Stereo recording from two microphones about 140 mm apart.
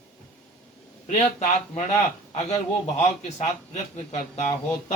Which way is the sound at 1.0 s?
55° left (ahead or behind).